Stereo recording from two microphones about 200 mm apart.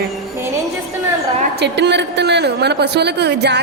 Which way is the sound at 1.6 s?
60° right (ahead or behind).